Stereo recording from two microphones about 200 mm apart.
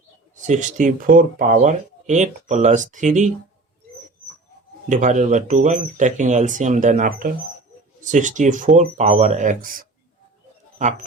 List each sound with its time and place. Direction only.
0.3 s speech: 40° right (ahead or behind)
4.9 s speech: 35° right (ahead or behind)